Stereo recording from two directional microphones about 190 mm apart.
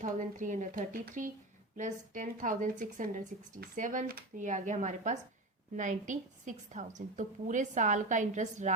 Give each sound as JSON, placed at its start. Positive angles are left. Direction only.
{"t": 0.0, "sound": "a woman's voice", "side_deg": -40}